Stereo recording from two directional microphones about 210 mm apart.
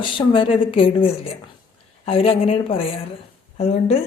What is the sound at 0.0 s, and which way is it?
A woman's voice, 25° left (ahead or behind).